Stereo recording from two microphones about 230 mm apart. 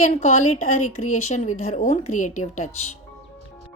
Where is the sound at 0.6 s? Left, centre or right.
Left.